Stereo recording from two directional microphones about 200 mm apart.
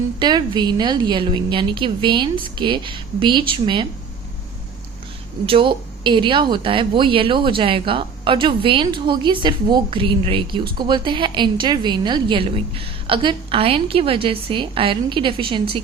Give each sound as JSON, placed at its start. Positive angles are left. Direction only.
{"t": 0.2, "sound": "speech", "side_deg": -20}
{"t": 5.5, "sound": "speech", "side_deg": -25}